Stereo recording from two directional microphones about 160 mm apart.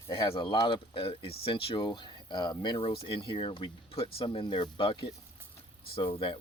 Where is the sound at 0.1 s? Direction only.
30° left (ahead or behind).